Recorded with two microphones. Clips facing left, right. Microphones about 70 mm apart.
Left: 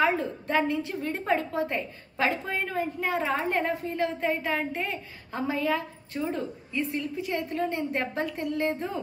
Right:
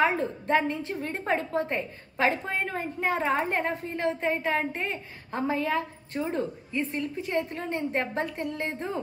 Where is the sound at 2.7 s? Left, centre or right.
Right.